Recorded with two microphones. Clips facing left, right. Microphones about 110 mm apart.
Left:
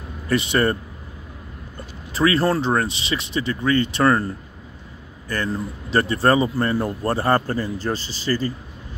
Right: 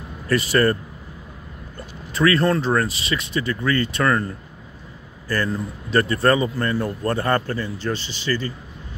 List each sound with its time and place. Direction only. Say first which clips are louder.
0.3 s speech: right 1 dB; 25° left (ahead or behind)
2.1 s a man's voice: even; 30° left (ahead or behind)
5.3 s speech: right 1 dB; 20° left (ahead or behind)
7.1 s a man's voice: left 2 dB; 30° left (ahead or behind)